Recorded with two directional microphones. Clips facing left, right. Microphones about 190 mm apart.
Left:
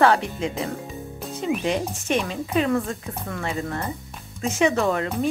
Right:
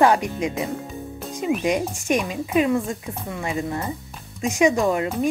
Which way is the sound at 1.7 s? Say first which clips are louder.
Right 2 dB; 10° right (ahead or behind).